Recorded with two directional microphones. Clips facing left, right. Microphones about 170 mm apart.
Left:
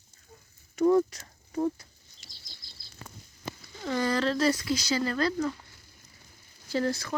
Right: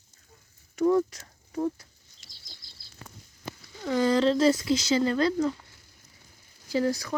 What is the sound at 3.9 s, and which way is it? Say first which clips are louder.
Speech: right 5 dB; 20° right (ahead or behind).